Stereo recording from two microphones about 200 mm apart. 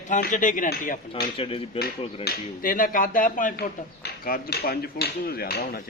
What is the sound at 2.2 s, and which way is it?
Speech, 45° left (ahead or behind).